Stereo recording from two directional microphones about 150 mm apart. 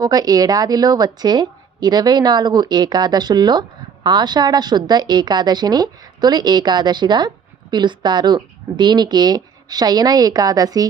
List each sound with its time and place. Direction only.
0.0 s a woman's voice: 25° right (ahead or behind)